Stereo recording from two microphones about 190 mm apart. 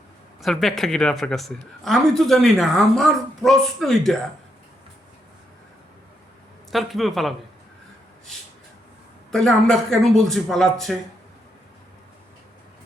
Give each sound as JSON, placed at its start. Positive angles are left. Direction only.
{"t": 0.4, "sound": "a woman's voice", "side_deg": 0}
{"t": 6.7, "sound": "a woman's voice", "side_deg": 0}
{"t": 9.3, "sound": "a woman's voice", "side_deg": 5}